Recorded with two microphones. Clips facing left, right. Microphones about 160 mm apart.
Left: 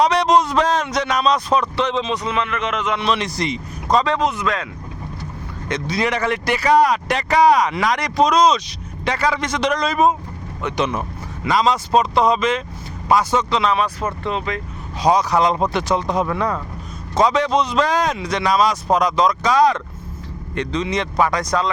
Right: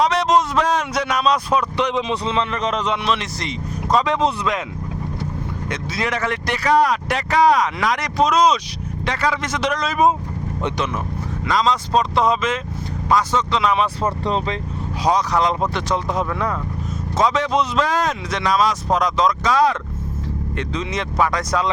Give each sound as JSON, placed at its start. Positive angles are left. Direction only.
{"t": 0.0, "sound": "a sound", "side_deg": 0}
{"t": 2.2, "sound": "speech", "side_deg": -30}
{"t": 3.0, "sound": "speech", "side_deg": 0}
{"t": 4.2, "sound": "speech", "side_deg": -20}
{"t": 5.6, "sound": "speech", "side_deg": -5}
{"t": 10.8, "sound": "speech", "side_deg": 20}
{"t": 11.4, "sound": "speech", "side_deg": 10}
{"t": 13.7, "sound": "speech", "side_deg": -20}
{"t": 14.0, "sound": "speech", "side_deg": -30}
{"t": 15.0, "sound": "speech", "side_deg": 5}